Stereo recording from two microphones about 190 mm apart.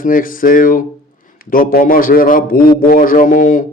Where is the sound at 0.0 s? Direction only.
45° left (ahead or behind).